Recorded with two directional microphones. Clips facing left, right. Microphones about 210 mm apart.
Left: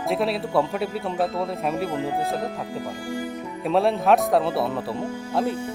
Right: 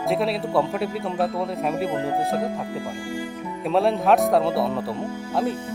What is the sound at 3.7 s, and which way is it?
Speech, centre (ahead or behind).